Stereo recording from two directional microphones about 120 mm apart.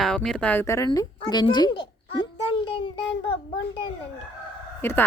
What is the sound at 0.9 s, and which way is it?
Speech, 35° left (ahead or behind).